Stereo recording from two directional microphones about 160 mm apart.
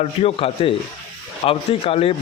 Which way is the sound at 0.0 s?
40° left (ahead or behind).